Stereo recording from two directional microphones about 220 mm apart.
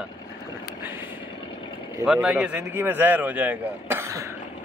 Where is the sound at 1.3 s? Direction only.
25° left (ahead or behind).